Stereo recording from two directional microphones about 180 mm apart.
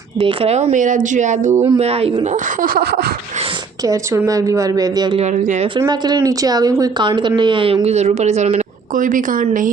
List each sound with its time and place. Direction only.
0.2 s speech: 30° right (ahead or behind)
1.6 s speech: 30° right (ahead or behind)
2.6 s a sound: 55° right (ahead or behind)
4.3 s speech: 20° right (ahead or behind)
5.2 s speech: 45° right (ahead or behind)
5.7 s speech: 20° right (ahead or behind); by 9.6 s 45° right (ahead or behind)